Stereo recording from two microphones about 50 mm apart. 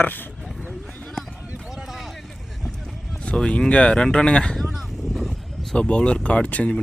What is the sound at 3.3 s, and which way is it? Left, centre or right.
Speech, centre.